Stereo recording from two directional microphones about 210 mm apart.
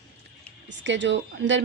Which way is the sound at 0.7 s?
60° right (ahead or behind).